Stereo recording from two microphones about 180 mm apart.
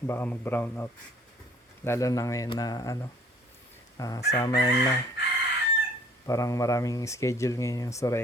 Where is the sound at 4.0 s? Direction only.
20° left (ahead or behind).